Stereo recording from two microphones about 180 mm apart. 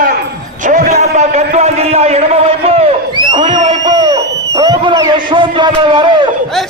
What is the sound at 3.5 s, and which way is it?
A man's voice, 25° right (ahead or behind).